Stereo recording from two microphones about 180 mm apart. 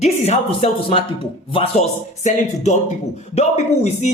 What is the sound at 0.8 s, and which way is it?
Speech, 30° left (ahead or behind).